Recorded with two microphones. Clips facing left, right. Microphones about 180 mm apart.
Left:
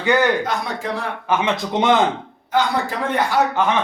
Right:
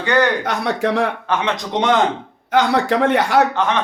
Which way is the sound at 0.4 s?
70° right (ahead or behind).